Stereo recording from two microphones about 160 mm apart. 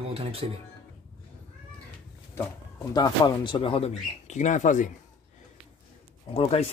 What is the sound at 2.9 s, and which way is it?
Speech, 25° left (ahead or behind).